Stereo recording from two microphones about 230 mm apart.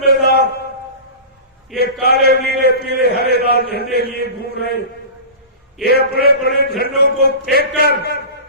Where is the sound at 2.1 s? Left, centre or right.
Left.